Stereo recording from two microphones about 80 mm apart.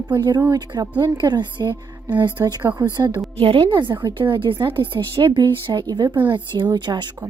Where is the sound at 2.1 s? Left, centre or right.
Right.